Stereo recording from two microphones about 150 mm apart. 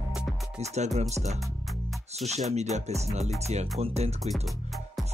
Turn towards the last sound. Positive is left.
turn(degrees=0)  # may be behind; listen again after turning